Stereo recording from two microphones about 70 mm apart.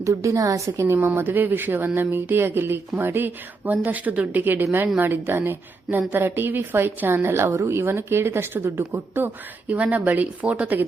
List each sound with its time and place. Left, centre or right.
0.0 s a woman's voice: right
0.9 s a woman's voice: right
9.6 s speech: right